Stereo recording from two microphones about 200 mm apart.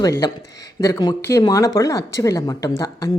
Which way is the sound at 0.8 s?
20° left (ahead or behind).